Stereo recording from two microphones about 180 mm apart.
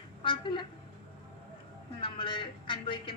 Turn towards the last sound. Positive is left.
turn(degrees=25)  # may be behind; listen again after turning